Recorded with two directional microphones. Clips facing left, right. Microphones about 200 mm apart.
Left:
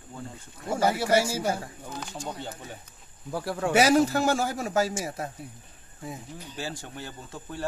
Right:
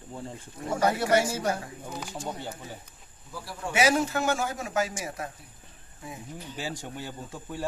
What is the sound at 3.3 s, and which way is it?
Speech, 65° left (ahead or behind).